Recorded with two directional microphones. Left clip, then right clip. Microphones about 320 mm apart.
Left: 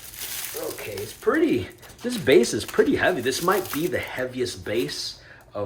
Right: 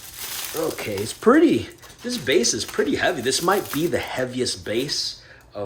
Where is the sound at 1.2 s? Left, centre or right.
Centre.